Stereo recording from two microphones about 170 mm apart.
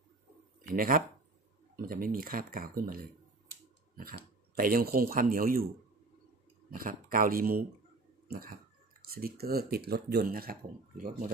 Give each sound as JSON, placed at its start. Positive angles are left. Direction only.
{"t": 0.7, "sound": "speech", "side_deg": -55}
{"t": 4.6, "sound": "speech", "side_deg": -60}
{"t": 6.7, "sound": "speech", "side_deg": -55}
{"t": 8.3, "sound": "a sound", "side_deg": -60}
{"t": 9.1, "sound": "speech", "side_deg": -65}